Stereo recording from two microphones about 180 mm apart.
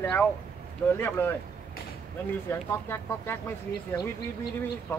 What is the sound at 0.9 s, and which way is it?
Speech, 15° left (ahead or behind).